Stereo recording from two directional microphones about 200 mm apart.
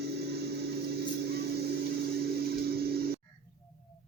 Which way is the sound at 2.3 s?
50° right (ahead or behind).